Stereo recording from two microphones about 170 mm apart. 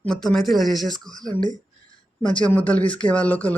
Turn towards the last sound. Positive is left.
turn(degrees=10)  # may be behind; listen again after turning